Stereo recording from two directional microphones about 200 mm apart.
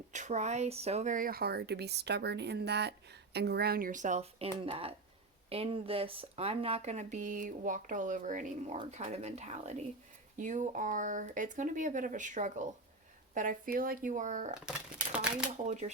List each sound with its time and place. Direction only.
0.1 s speech: 35° right (ahead or behind)
14.6 s a sound: 5° right (ahead or behind)
15.6 s speech: 35° right (ahead or behind)